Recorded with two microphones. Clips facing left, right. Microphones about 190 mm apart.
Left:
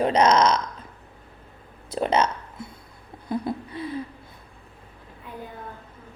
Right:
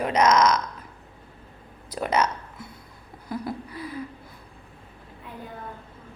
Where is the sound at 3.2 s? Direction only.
25° left (ahead or behind).